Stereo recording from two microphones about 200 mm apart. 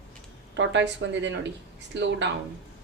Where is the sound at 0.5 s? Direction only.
65° right (ahead or behind).